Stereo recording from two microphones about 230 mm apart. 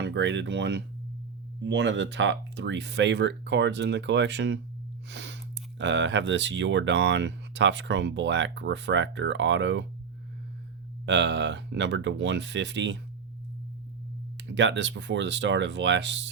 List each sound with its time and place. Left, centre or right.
0.0 s speech: right
5.0 s a sound: right
5.8 s speech: right
11.0 s speech: right
14.3 s speech: right